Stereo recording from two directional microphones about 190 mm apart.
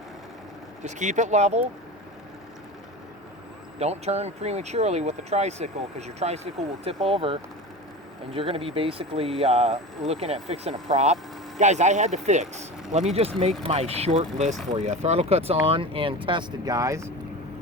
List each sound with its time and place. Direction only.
0.9 s speech: 40° right (ahead or behind)
3.8 s speech: 35° right (ahead or behind); by 17.1 s 15° right (ahead or behind)